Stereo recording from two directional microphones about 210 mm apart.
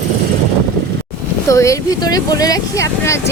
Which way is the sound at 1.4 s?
15° left (ahead or behind).